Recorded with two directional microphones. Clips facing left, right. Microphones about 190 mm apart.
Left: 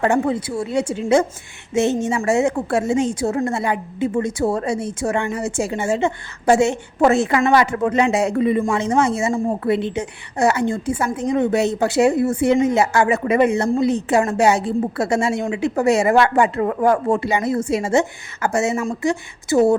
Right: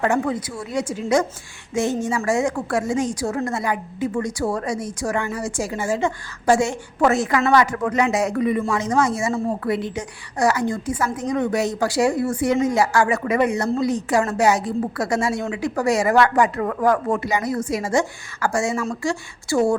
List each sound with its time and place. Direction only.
0.0 s a woman's voice: 30° left (ahead or behind)